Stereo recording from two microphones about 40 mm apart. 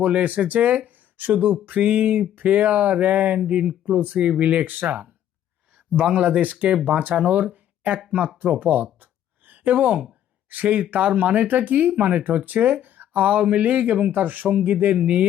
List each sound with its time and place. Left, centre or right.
0.0 s speech: right
3.8 s speech: right
5.7 s speech: right
6.4 s speech: right
7.3 s a sound: right
10.5 s speech: right
10.9 s speech: right
11.2 s speech: right